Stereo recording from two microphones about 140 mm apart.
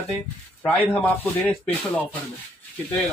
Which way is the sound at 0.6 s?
10° left (ahead or behind).